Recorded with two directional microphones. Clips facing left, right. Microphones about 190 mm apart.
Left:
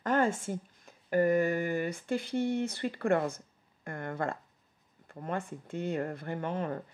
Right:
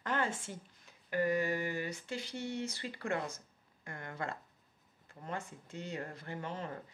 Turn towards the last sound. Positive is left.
turn(degrees=55)  # may be behind; listen again after turning